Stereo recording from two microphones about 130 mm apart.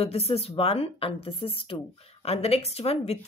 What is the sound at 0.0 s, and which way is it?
Speech, 50° left (ahead or behind).